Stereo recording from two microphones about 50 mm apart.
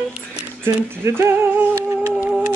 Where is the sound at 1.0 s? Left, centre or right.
Right.